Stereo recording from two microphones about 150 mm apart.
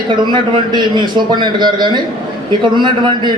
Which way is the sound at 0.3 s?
30° right (ahead or behind).